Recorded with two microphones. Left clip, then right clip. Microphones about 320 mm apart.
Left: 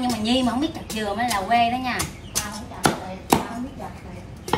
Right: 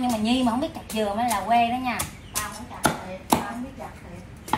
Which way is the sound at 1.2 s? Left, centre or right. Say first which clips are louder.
Left 2 dB; centre.